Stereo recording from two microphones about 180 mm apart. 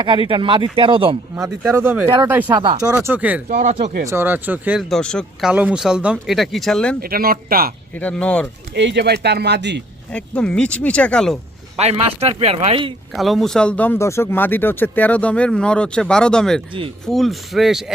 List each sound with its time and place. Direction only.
0.0 s speech: 30° right (ahead or behind)
1.7 s speech: 15° right (ahead or behind)
2.0 s speech: 25° right (ahead or behind)
2.3 s speech: 10° right (ahead or behind)
3.5 s speech: 45° right (ahead or behind)
4.0 s speech: 15° right (ahead or behind); by 6.9 s centre (ahead or behind)
7.0 s speech: 55° right (ahead or behind)
7.9 s speech: 5° left (ahead or behind)
8.7 s speech: 70° right (ahead or behind)
10.1 s speech: 5° left (ahead or behind)
11.8 s speech: 35° right (ahead or behind)
13.1 s speech: centre (ahead or behind)